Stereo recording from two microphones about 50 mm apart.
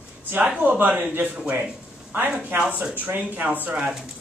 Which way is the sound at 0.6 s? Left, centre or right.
Right.